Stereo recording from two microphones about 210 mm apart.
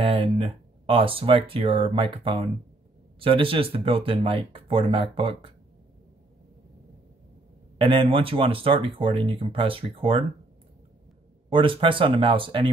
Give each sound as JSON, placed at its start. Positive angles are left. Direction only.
{"t": 0.0, "sound": "speech", "side_deg": -25}
{"t": 7.8, "sound": "speech", "side_deg": -25}
{"t": 11.5, "sound": "speech", "side_deg": -25}